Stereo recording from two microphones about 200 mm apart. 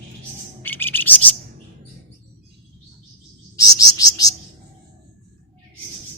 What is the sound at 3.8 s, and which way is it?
Bird, 20° left (ahead or behind).